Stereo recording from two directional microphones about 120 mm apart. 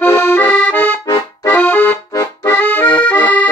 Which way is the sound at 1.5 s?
15° left (ahead or behind).